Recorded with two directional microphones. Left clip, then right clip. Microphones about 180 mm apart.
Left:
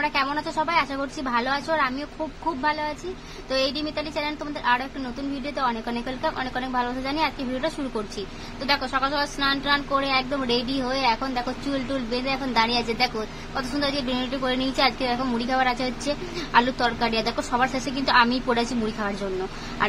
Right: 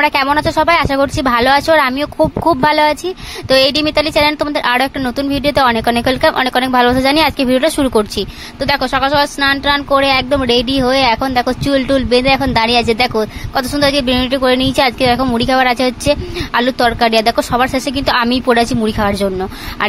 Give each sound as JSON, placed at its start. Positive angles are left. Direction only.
{"t": 0.0, "sound": "a woman's voice", "side_deg": -55}